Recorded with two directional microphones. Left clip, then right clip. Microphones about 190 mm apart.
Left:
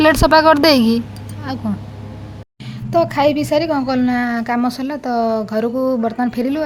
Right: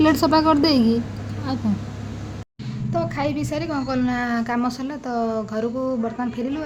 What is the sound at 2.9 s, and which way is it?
A woman's voice, 35° left (ahead or behind).